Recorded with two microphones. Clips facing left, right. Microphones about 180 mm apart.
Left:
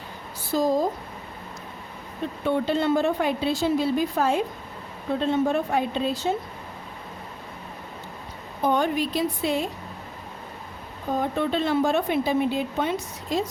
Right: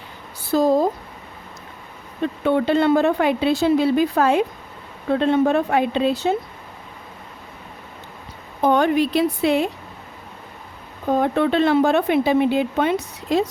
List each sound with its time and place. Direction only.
0.5 s speech: 60° right (ahead or behind)
2.4 s a woman's voice: 75° right (ahead or behind)
8.6 s a woman's voice: 70° right (ahead or behind)
11.2 s a woman's voice: 75° right (ahead or behind)